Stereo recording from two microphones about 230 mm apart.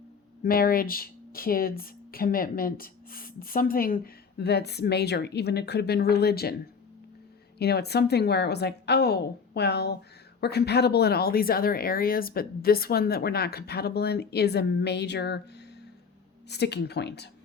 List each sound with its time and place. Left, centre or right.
0.4 s speech: left
7.6 s speech: left
16.5 s speech: left